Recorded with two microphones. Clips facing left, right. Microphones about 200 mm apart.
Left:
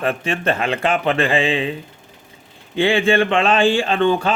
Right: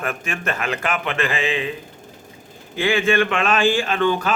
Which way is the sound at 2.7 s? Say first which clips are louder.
Left 3 dB; 30° left (ahead or behind).